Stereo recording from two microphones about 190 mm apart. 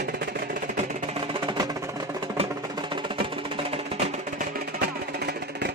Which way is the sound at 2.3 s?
25° right (ahead or behind).